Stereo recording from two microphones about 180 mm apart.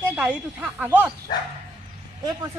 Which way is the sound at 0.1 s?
10° right (ahead or behind).